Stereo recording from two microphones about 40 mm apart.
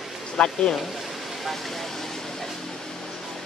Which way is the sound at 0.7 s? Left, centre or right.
Centre.